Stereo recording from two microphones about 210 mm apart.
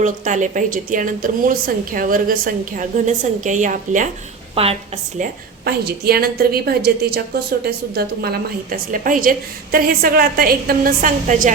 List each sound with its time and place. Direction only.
0.0 s a woman's voice: 35° right (ahead or behind)
4.6 s a woman's voice: 25° right (ahead or behind)
5.2 s a woman's voice: 50° right (ahead or behind)